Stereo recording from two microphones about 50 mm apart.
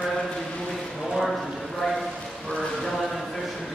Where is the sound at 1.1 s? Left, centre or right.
Centre.